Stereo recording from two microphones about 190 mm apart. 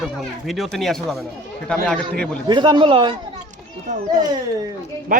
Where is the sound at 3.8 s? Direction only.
45° right (ahead or behind).